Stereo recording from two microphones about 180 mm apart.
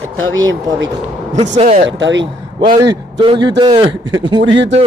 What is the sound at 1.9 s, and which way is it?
Speech, 85° right.